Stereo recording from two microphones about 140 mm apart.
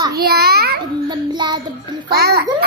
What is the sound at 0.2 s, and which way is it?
Speech, 90° right.